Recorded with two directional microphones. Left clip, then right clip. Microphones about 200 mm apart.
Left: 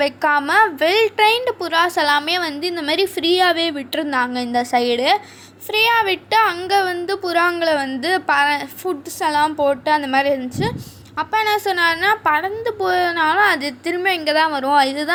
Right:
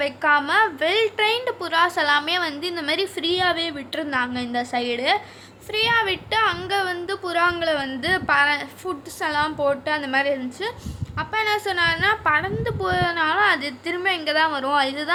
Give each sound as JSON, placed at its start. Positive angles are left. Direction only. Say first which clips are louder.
{"t": 0.0, "sound": "a woman's voice", "louder": "left 3 dB", "side_deg": 20}